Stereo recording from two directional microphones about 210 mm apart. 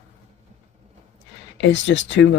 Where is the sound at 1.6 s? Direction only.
60° left (ahead or behind).